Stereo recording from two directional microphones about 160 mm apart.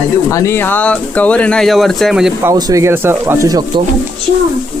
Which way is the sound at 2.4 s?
20° right (ahead or behind).